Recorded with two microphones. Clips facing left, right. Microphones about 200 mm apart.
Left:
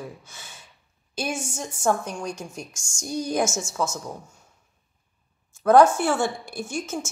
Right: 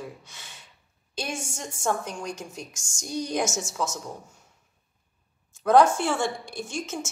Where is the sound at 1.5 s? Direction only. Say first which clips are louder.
Left 4 dB; 5° left (ahead or behind).